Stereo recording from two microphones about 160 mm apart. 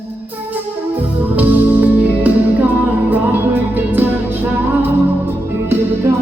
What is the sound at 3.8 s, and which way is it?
Music, 10° right (ahead or behind).